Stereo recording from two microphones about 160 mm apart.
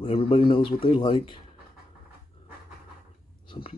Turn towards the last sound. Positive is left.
turn(degrees=30)  # may be behind; listen again after turning